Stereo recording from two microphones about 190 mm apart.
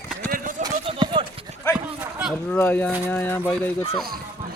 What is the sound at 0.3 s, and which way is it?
Run, 45° right (ahead or behind).